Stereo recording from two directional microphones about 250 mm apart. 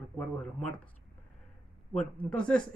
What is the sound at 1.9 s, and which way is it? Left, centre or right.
Speech, centre.